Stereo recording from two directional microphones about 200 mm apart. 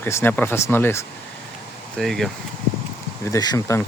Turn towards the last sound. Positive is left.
turn(degrees=15)  # may be behind; listen again after turning